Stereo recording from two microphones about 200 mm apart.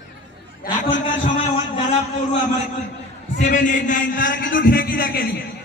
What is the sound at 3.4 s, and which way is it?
A man's voice, 40° left (ahead or behind).